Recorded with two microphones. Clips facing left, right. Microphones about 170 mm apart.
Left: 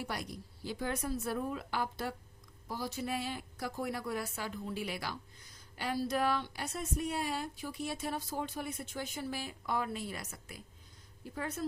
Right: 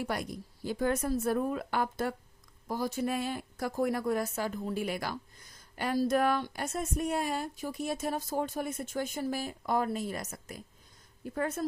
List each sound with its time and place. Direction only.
0.1 s speech: 50° right (ahead or behind)